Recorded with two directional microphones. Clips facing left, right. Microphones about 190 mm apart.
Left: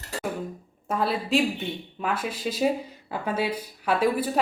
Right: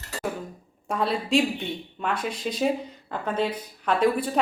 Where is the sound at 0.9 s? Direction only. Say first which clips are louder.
Even; centre (ahead or behind).